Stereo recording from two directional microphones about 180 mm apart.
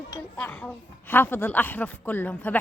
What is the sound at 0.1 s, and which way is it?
A woman's voice, 10° left (ahead or behind).